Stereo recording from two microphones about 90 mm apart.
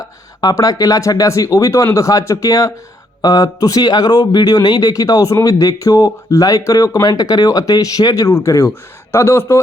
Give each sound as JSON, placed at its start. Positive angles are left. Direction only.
{"t": 0.0, "sound": "a man's voice", "side_deg": 40}